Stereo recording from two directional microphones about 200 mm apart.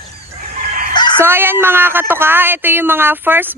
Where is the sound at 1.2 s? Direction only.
10° right (ahead or behind).